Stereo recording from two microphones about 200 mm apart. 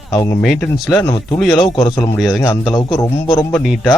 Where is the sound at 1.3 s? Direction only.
Centre (ahead or behind).